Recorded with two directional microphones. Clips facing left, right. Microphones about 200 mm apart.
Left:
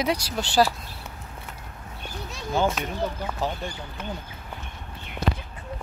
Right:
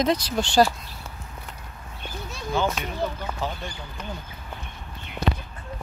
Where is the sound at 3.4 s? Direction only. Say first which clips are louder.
Left 2 dB; 40° left (ahead or behind).